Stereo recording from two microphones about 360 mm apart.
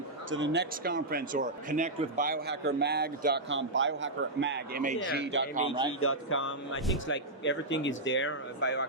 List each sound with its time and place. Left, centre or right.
0.3 s speech: right
5.5 s a man's voice: centre
6.0 s speech: left